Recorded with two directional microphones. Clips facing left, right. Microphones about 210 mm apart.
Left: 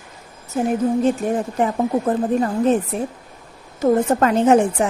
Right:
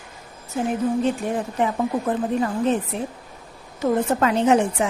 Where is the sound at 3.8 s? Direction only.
45° left (ahead or behind).